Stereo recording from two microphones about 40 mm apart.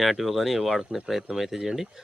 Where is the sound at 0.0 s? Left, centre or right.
Centre.